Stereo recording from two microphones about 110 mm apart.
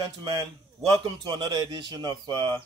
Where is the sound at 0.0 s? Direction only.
45° right (ahead or behind).